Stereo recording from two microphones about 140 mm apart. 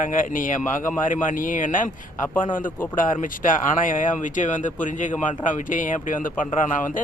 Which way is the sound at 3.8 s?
70° left (ahead or behind).